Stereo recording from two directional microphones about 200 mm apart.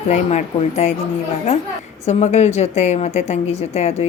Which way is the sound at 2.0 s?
35° left (ahead or behind).